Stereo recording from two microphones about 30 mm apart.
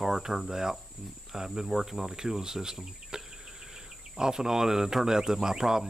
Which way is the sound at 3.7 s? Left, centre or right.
Right.